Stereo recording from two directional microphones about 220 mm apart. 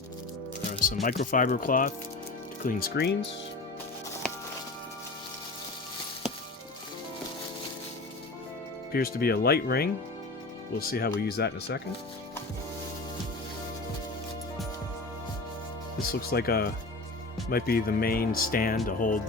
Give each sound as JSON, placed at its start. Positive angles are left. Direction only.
{"t": 1.0, "sound": "speech", "side_deg": 35}
{"t": 8.9, "sound": "speech", "side_deg": 40}
{"t": 16.0, "sound": "speech", "side_deg": 45}